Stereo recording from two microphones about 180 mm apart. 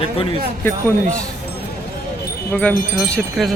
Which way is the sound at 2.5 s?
5° left (ahead or behind).